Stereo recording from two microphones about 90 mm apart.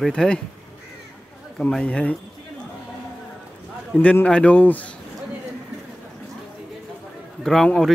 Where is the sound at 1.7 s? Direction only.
10° left (ahead or behind).